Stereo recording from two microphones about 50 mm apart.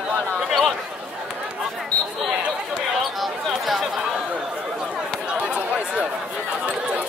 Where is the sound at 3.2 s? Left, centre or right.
Centre.